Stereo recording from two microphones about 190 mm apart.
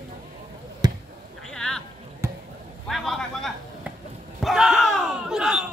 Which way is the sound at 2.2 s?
15° right (ahead or behind).